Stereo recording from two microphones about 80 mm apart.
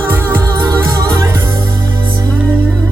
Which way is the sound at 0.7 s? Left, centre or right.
Right.